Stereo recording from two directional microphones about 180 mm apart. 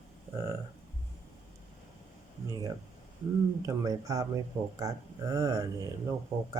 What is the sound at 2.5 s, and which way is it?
Speech, 20° right (ahead or behind).